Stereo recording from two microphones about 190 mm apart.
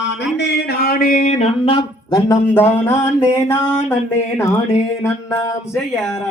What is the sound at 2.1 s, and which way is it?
Speech, 15° left (ahead or behind).